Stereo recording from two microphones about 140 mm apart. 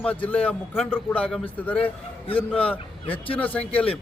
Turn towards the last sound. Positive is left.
turn(degrees=10)  # may be behind; listen again after turning